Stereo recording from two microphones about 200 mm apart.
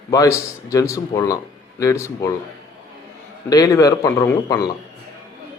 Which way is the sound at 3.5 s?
15° left (ahead or behind).